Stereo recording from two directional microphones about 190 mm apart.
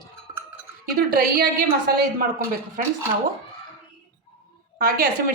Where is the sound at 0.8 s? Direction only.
50° right (ahead or behind).